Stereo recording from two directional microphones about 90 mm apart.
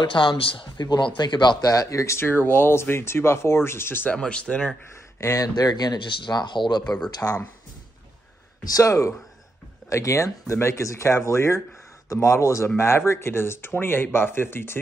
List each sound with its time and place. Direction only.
0.0 s speech: 65° left (ahead or behind)
1.7 s speech: 35° left (ahead or behind)
4.1 s speech: 10° left (ahead or behind)
5.2 s speech: 40° left (ahead or behind)
7.2 s speech: 20° left (ahead or behind)
8.6 s speech: 40° left (ahead or behind); by 14.8 s 25° left (ahead or behind)